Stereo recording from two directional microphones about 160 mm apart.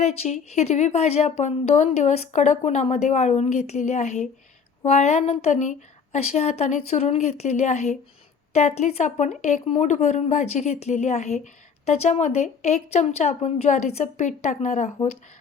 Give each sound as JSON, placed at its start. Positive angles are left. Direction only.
{"t": 0.0, "sound": "speech", "side_deg": 45}